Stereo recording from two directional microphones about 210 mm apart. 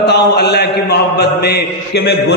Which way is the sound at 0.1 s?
50° left (ahead or behind).